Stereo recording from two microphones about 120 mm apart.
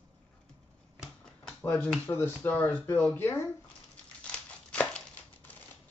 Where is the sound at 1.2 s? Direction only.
10° left (ahead or behind).